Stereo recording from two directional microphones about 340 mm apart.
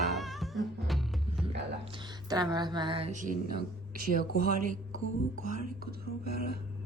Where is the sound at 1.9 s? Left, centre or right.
Centre.